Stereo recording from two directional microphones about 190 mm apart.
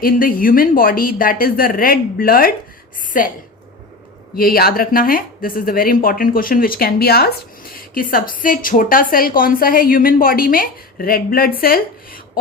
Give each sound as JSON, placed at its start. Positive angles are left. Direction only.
{"t": 0.0, "sound": "speech", "side_deg": 50}
{"t": 4.4, "sound": "speech", "side_deg": 50}